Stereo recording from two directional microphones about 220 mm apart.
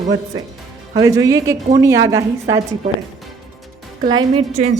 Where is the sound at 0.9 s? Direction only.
15° right (ahead or behind).